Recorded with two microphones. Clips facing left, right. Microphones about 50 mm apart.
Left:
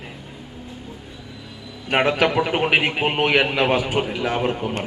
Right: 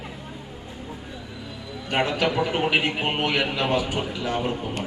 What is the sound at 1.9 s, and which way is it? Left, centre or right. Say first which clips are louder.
A man's voice: left 5 dB; left.